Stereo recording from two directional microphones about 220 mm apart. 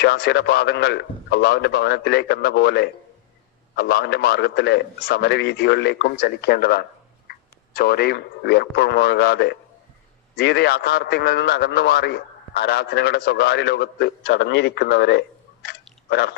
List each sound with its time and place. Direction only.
0.0 s a man's voice: 45° left (ahead or behind)
15.6 s chewing: 45° left (ahead or behind)